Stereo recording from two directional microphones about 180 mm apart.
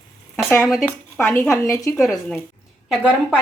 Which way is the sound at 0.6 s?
Centre (ahead or behind).